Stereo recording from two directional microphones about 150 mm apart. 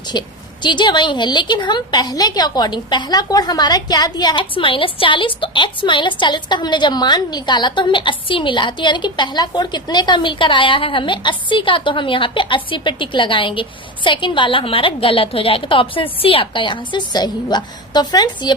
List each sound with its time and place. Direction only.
0.1 s a woman's voice: 30° left (ahead or behind)